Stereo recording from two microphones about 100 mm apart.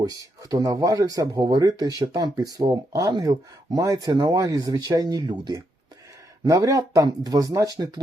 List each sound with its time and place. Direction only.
0.0 s speech: 35° right (ahead or behind)